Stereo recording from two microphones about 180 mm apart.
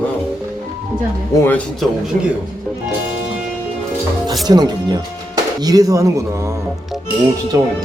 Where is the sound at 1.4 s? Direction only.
10° left (ahead or behind).